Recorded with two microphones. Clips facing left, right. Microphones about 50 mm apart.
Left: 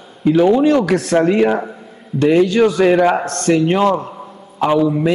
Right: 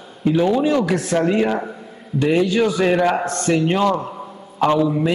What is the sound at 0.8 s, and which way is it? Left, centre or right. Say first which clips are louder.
Speech: left 4 dB; left.